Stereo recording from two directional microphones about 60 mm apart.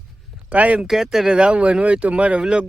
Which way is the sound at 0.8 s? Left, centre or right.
Centre.